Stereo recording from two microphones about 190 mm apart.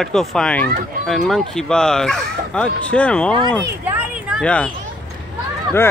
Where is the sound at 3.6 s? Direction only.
10° right (ahead or behind).